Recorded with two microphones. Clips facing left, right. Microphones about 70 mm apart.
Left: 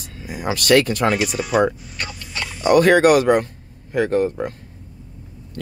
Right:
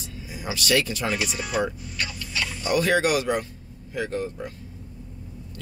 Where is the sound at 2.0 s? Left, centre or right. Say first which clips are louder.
Left 1 dB; left.